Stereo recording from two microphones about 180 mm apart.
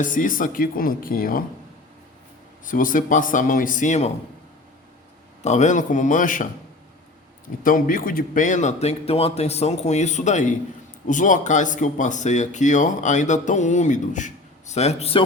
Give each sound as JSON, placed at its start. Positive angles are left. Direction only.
{"t": 0.0, "sound": "speech", "side_deg": 45}
{"t": 2.6, "sound": "speech", "side_deg": 50}
{"t": 5.4, "sound": "speech", "side_deg": 40}
{"t": 7.6, "sound": "speech", "side_deg": 50}